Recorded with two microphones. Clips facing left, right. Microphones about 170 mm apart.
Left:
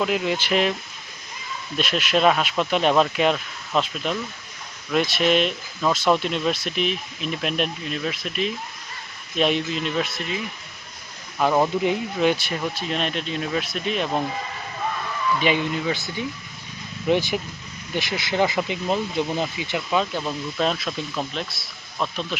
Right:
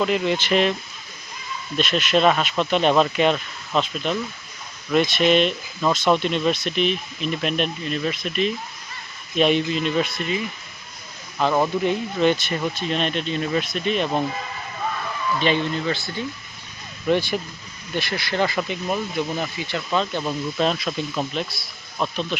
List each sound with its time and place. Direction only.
0.0 s speech: 5° left (ahead or behind)
1.8 s speech: 5° left (ahead or behind)
15.4 s speech: 10° left (ahead or behind)